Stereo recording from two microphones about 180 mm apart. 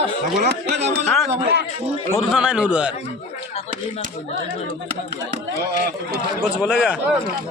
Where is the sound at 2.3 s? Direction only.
5° right (ahead or behind).